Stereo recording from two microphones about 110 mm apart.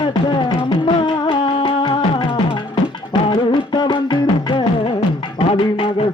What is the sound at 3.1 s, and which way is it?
Music, 45° left (ahead or behind).